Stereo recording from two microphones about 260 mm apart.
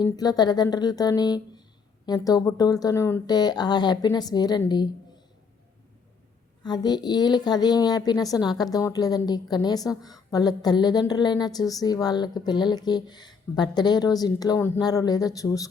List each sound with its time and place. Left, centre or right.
0.0 s a woman's voice: centre
6.6 s a woman's voice: centre